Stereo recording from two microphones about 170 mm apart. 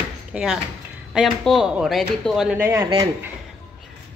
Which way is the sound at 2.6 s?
20° right (ahead or behind).